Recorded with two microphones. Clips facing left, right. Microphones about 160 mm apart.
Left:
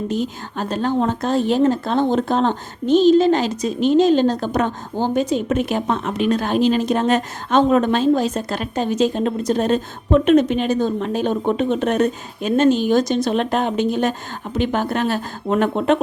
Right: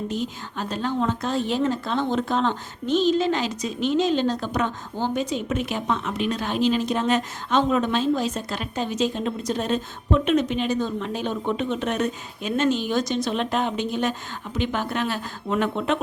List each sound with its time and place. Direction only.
0.1 s speech: 45° left (ahead or behind)